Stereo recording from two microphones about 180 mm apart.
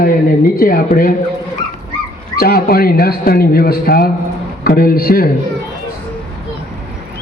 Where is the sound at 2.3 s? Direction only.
55° left (ahead or behind).